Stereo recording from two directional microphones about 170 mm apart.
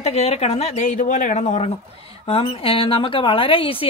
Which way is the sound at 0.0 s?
35° left (ahead or behind).